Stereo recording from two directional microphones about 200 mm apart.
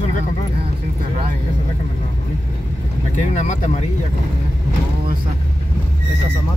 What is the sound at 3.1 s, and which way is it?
Speech, 40° left (ahead or behind).